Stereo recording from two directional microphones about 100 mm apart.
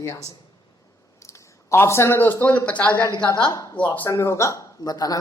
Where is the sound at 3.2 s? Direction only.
50° left (ahead or behind).